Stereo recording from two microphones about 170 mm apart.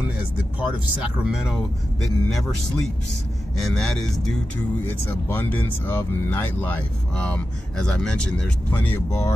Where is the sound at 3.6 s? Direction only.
Centre (ahead or behind).